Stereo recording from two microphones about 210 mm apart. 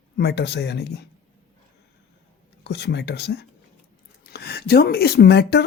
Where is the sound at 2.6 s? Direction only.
55° left (ahead or behind).